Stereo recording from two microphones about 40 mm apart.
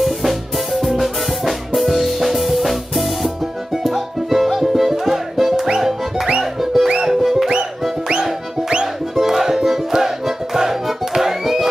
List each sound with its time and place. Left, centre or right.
0.0 s music: centre
8.1 s music: centre